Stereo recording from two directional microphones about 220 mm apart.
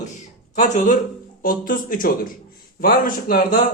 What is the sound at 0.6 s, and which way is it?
A man's voice, 35° left (ahead or behind).